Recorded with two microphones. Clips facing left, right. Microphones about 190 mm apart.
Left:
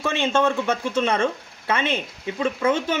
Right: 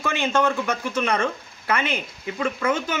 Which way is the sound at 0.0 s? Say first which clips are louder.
Left 1 dB; 25° left (ahead or behind).